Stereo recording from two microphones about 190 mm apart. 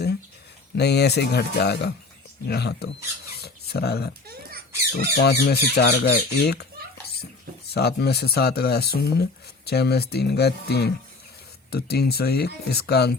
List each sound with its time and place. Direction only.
0.8 s speech: 60° left (ahead or behind)
3.4 s a sound: 55° left (ahead or behind)
5.1 s speech: 60° left (ahead or behind)
7.7 s speech: 55° left (ahead or behind)